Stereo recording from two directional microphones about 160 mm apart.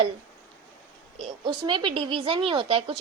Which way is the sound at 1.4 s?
30° right (ahead or behind).